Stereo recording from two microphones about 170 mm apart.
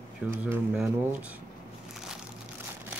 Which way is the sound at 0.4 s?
10° right (ahead or behind).